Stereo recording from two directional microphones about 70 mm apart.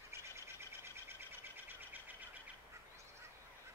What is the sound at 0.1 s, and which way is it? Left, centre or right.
Bird, right.